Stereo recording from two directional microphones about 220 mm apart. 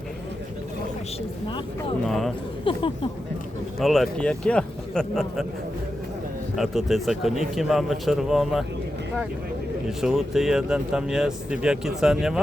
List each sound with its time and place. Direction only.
2.0 s speech: centre (ahead or behind)
2.6 s speech: 25° left (ahead or behind)
3.8 s speech: centre (ahead or behind)
6.6 s speech: centre (ahead or behind)
10.0 s speech: centre (ahead or behind)